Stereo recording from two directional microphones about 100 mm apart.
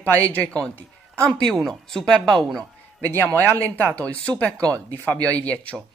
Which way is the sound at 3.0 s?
20° left (ahead or behind).